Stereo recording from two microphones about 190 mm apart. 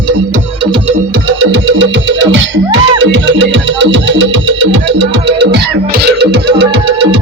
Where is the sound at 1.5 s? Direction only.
80° right; by 6.8 s 60° right (ahead or behind).